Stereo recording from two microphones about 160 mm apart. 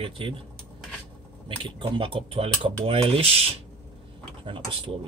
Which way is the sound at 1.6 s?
35° right (ahead or behind).